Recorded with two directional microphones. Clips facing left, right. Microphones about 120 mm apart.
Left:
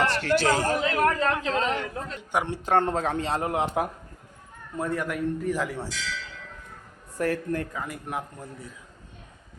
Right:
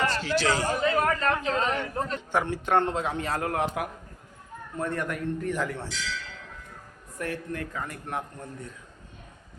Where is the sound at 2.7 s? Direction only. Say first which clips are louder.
Left 2 dB; 45° left (ahead or behind).